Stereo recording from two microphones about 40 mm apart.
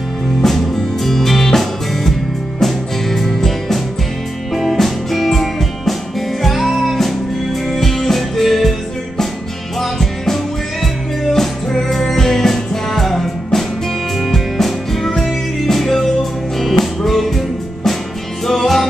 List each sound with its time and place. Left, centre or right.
0.4 s music: centre
9.8 s music: centre